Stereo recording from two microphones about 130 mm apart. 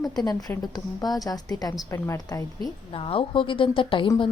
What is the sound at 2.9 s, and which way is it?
A woman's voice, 45° left (ahead or behind).